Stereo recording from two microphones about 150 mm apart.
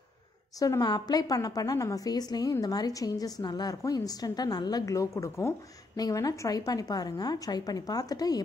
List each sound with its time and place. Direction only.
0.6 s a woman's voice: 25° left (ahead or behind)